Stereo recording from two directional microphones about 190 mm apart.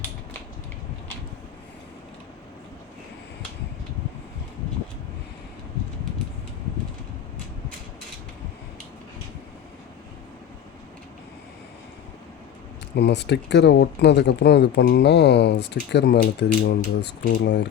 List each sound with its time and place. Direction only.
13.0 s speech: 65° left (ahead or behind)